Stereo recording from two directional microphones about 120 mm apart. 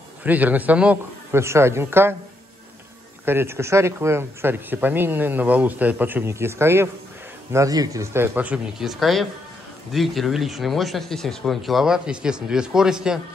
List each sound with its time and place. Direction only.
0.2 s speech: 15° right (ahead or behind)
1.3 s speech: 20° right (ahead or behind)
3.3 s speech: 20° right (ahead or behind)